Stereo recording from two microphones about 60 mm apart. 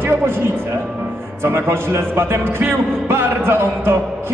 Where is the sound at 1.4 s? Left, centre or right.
Right.